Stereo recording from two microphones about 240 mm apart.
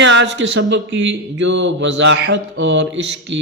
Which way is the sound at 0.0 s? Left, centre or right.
Right.